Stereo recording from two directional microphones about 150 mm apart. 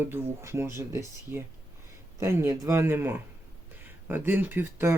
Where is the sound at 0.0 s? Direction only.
15° right (ahead or behind).